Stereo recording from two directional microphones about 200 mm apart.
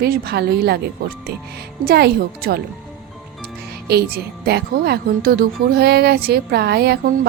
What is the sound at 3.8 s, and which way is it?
Speech, 50° right (ahead or behind).